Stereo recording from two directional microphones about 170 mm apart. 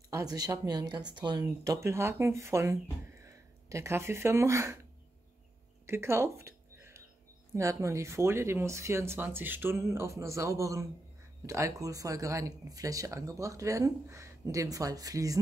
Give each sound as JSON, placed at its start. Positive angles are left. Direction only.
{"t": 0.1, "sound": "speech", "side_deg": -20}
{"t": 5.9, "sound": "a sound", "side_deg": -15}
{"t": 7.5, "sound": "speech", "side_deg": -15}